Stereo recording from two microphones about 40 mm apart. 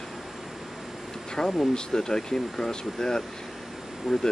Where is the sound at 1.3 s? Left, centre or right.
Centre.